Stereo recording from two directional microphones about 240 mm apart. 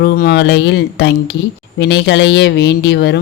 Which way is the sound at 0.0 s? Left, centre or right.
Left.